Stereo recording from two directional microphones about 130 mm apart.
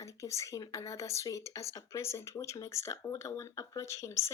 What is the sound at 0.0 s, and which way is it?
Speech, 25° left (ahead or behind).